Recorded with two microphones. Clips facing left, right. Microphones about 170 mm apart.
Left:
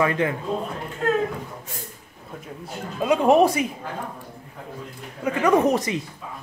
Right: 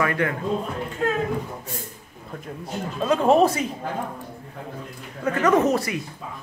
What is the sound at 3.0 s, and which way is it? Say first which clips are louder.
Speech: left 1 dB; 15° left (ahead or behind).